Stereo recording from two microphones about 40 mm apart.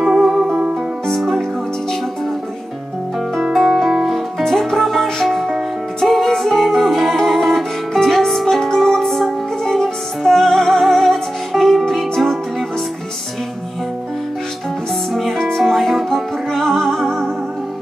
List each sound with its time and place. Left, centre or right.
0.2 s music: centre
3.5 s music: centre
15.1 s music: centre